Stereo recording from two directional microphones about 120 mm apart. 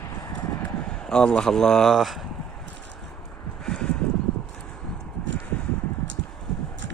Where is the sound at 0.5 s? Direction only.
10° left (ahead or behind).